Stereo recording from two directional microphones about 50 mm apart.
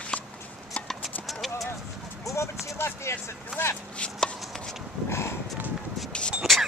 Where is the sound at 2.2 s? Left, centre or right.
Left.